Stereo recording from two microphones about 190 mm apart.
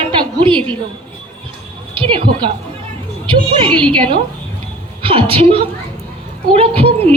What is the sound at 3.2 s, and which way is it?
Speech, 30° right (ahead or behind).